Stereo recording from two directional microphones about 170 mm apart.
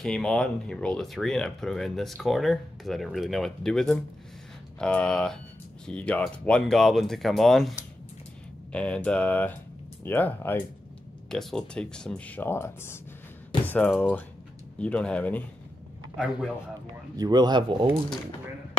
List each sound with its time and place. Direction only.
0.0 s speech: 5° left (ahead or behind)
8.7 s speech: 5° left (ahead or behind)
16.2 s speech: 5° right (ahead or behind)
17.2 s speech: 25° right (ahead or behind)